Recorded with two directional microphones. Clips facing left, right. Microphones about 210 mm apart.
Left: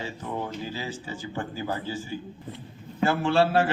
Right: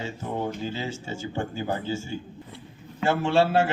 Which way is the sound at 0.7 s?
25° right (ahead or behind).